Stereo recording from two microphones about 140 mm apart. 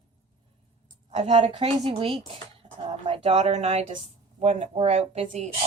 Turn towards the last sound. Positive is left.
turn(degrees=-55)  # may be behind; listen again after turning